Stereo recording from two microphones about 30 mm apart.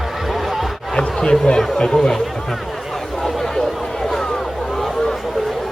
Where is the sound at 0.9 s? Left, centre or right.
Left.